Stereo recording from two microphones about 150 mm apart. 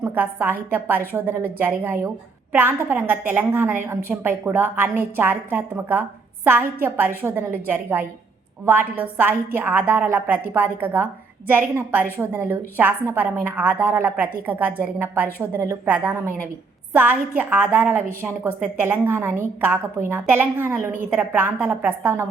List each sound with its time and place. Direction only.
0.0 s a woman's voice: 15° right (ahead or behind)